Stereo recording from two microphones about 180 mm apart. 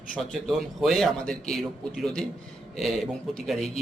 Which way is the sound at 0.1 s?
5° left (ahead or behind).